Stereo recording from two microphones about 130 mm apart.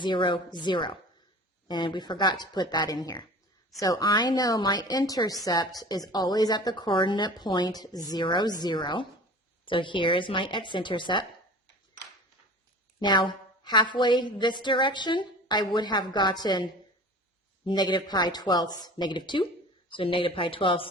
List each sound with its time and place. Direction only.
0.0 s a woman's voice: 40° left (ahead or behind)
13.0 s a woman's voice: 35° left (ahead or behind)
17.7 s a woman's voice: 35° left (ahead or behind)